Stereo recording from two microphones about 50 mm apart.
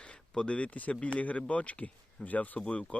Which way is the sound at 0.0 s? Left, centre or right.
Left.